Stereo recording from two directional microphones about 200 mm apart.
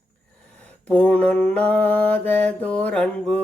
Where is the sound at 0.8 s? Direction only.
5° left (ahead or behind).